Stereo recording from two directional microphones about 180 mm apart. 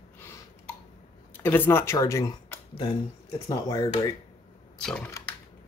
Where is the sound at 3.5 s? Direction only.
20° left (ahead or behind).